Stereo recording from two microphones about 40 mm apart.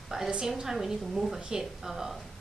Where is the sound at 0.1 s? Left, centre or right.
Centre.